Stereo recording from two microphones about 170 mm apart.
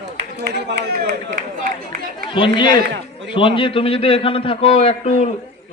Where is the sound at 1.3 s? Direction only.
55° right (ahead or behind).